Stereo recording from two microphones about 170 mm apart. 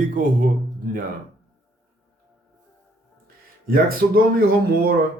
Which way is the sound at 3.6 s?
60° right (ahead or behind).